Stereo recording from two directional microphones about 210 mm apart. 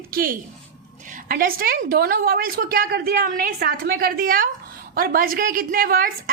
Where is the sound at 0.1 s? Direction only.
45° right (ahead or behind).